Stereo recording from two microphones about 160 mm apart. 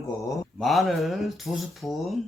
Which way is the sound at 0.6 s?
Centre (ahead or behind).